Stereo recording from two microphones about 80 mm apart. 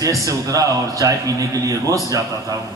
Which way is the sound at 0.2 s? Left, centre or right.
Right.